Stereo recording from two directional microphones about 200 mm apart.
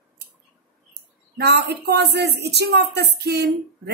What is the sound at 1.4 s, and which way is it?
Speech, 55° right (ahead or behind).